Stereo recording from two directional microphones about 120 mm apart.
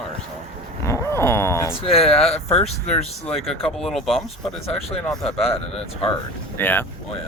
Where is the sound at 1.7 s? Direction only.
55° left (ahead or behind).